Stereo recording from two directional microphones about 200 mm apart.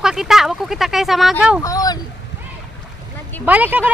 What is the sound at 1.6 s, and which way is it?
Speech, 20° left (ahead or behind).